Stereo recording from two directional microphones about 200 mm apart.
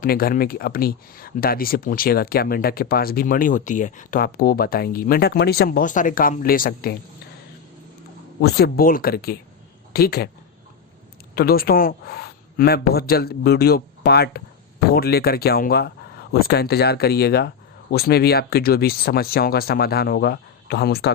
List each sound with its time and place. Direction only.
0.0 s speech: 50° left (ahead or behind)
8.4 s speech: 55° left (ahead or behind)
11.3 s speech: 50° left (ahead or behind)